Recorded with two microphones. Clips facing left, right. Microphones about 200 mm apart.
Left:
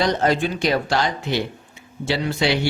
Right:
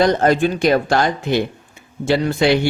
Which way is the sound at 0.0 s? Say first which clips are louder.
Right 5 dB; 50° right (ahead or behind).